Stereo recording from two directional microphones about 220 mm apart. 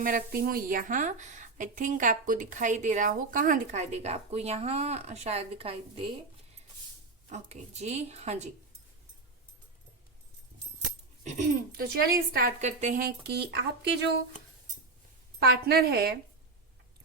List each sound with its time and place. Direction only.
0.0 s a woman's voice: 40° right (ahead or behind)
7.3 s a woman's voice: 30° right (ahead or behind)
11.2 s speech: 35° right (ahead or behind); by 14.1 s 50° right (ahead or behind)
15.4 s speech: 45° right (ahead or behind)